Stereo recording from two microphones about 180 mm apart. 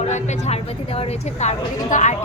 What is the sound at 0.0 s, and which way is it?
A woman's voice, 40° left (ahead or behind).